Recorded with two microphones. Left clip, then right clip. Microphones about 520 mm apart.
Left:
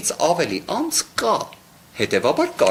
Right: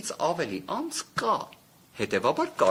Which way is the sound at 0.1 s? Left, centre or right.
Right.